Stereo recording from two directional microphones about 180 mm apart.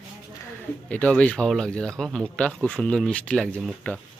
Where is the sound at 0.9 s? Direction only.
5° left (ahead or behind).